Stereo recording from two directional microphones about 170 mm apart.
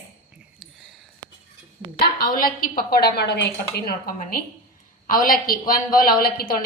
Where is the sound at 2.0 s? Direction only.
60° left (ahead or behind).